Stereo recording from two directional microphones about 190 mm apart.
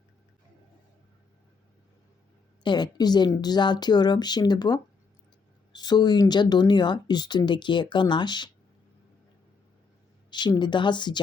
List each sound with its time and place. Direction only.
2.6 s speech: 20° left (ahead or behind)
10.2 s speech: 25° left (ahead or behind)